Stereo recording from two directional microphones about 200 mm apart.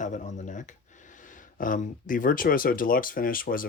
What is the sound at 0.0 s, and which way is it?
Speech, 40° left (ahead or behind).